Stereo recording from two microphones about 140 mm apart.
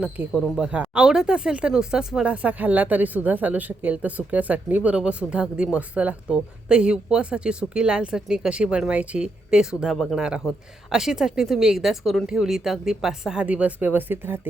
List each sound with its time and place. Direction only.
0.2 s speech: 15° right (ahead or behind)